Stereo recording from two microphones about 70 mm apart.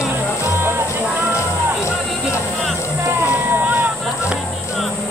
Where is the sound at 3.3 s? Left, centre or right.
Right.